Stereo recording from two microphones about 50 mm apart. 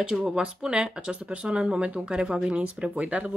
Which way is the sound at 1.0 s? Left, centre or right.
Right.